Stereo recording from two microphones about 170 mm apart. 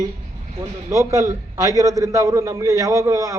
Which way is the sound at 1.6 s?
20° right (ahead or behind).